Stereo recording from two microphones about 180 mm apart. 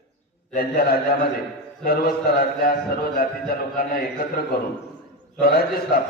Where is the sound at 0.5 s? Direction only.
55° left (ahead or behind).